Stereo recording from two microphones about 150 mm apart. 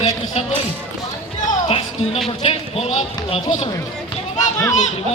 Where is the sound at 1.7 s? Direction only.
40° left (ahead or behind).